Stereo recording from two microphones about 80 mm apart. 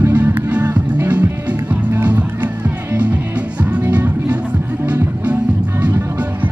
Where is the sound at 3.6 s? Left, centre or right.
Centre.